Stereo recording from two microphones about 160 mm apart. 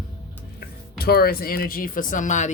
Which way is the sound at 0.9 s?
75° left (ahead or behind).